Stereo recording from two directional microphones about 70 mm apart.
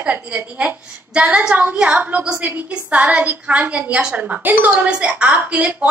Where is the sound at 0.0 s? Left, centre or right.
Centre.